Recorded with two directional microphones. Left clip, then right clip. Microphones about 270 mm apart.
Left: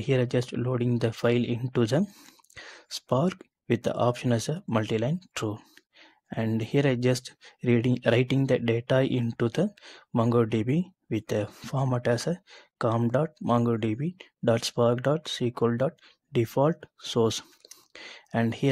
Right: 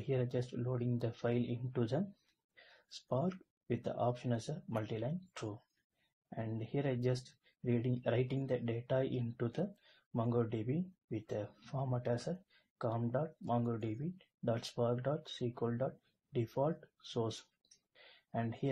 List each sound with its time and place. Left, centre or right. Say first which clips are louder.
0.1 s speech: left 12 dB; left
3.1 s speech: left 11 dB; left